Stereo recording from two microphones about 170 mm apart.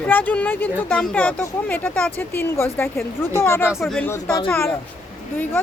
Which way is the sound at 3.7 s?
Centre (ahead or behind).